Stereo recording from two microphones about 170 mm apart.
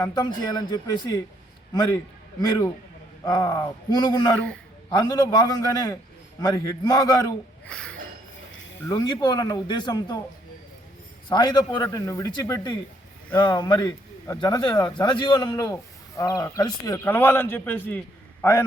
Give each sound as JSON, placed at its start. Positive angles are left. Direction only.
{"t": 0.0, "sound": "a man's voice", "side_deg": 25}
{"t": 4.4, "sound": "a man's voice", "side_deg": 5}
{"t": 4.9, "sound": "a man's voice", "side_deg": 25}
{"t": 7.6, "sound": "a sound", "side_deg": 5}
{"t": 8.9, "sound": "a man's voice", "side_deg": 25}
{"t": 11.3, "sound": "a man's voice", "side_deg": 25}